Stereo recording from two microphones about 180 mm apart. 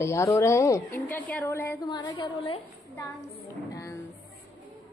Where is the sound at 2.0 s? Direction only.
25° left (ahead or behind).